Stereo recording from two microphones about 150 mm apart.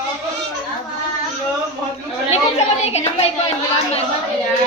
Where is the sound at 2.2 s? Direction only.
45° left (ahead or behind).